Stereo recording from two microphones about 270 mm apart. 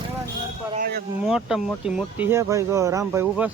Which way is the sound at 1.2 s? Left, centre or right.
Centre.